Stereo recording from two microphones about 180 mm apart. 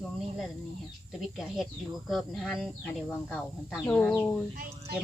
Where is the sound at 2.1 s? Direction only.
Centre (ahead or behind).